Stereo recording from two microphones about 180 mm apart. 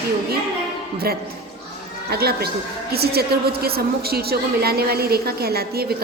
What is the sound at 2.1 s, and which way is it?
A woman's voice, 60° right (ahead or behind).